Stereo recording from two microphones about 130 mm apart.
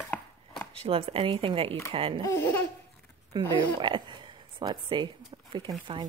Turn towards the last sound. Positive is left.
turn(degrees=-35)  # may be behind; listen again after turning